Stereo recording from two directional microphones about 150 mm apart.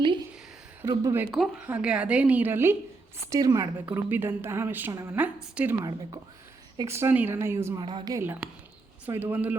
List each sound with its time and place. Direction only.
0.9 s speech: 20° right (ahead or behind)
1.3 s a woman's voice: centre (ahead or behind)
6.7 s a woman's voice: 15° right (ahead or behind)
7.8 s speech: 30° right (ahead or behind)
8.2 s a woman's voice: 15° right (ahead or behind)